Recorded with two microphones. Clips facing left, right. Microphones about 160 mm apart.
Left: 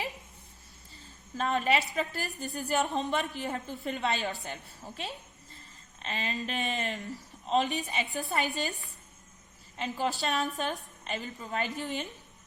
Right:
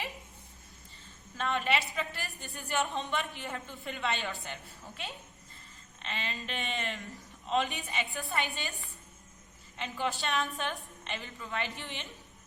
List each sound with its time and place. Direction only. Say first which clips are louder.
1.4 s a woman's voice: left 3 dB; 40° left (ahead or behind)
9.7 s a woman's voice: left 3 dB; 40° left (ahead or behind)